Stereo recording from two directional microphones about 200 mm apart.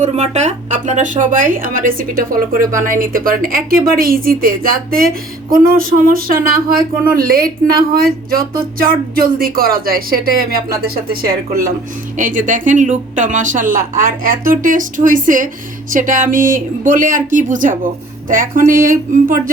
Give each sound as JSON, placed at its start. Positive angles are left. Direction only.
{"t": 0.0, "sound": "a woman's voice", "side_deg": -35}